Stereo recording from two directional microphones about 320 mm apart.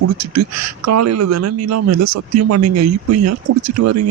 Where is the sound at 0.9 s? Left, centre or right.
Right.